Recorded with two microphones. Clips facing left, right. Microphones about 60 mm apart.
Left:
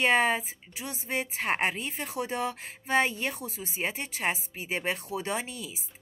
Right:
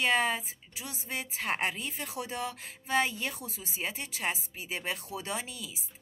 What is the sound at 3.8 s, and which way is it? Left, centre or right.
Speech, left.